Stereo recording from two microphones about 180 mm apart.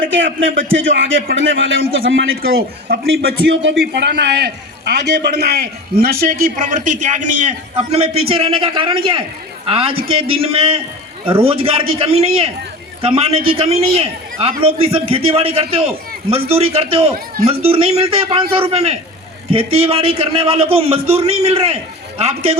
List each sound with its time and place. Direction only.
0.3 s a man's voice: 90° right
3.9 s a man's voice: 70° right (ahead or behind); by 21.8 s 35° right (ahead or behind)